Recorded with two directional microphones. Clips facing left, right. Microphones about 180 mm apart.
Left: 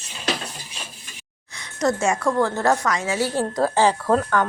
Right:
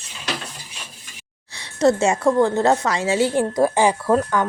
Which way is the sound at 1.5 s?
30° right (ahead or behind).